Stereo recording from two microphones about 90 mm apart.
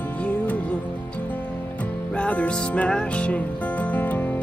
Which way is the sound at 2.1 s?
15° left (ahead or behind).